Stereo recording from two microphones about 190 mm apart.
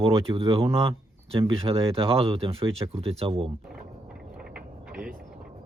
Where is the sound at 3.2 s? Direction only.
30° right (ahead or behind).